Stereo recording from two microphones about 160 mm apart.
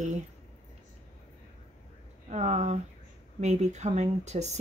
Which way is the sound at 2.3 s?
45° right (ahead or behind).